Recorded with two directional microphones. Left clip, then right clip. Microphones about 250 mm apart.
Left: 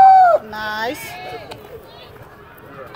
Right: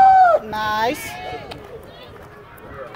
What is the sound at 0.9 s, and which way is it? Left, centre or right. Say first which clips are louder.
Speech: right 2 dB; centre.